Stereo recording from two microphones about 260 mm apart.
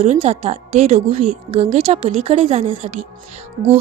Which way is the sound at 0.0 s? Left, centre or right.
Right.